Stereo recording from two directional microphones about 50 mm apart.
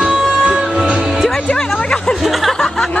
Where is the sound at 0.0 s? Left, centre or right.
Centre.